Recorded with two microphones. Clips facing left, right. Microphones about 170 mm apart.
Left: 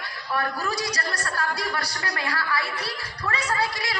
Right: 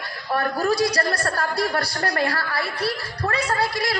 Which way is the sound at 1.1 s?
35° right (ahead or behind).